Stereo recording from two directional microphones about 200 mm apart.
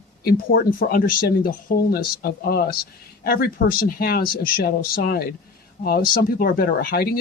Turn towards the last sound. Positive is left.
turn(degrees=50)  # may be behind; listen again after turning